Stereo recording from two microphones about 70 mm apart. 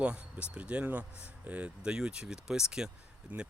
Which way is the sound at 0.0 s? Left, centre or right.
Centre.